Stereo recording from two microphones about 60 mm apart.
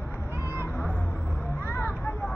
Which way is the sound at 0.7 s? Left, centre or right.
Left.